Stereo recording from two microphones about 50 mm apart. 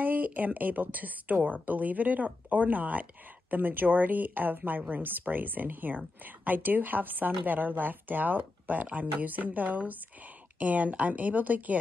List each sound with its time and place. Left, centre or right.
0.0 s a woman's voice: right